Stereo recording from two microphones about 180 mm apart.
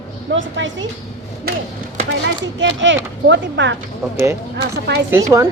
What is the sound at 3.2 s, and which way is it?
Speech, 80° right.